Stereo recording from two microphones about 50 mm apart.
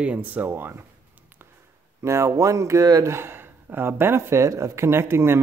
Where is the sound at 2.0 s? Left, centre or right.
Right.